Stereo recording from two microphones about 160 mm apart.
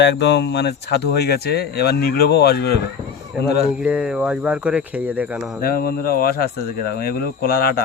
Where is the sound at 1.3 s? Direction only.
80° left.